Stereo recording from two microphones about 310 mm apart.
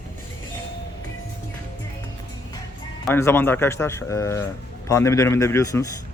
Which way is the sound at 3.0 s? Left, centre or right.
Centre.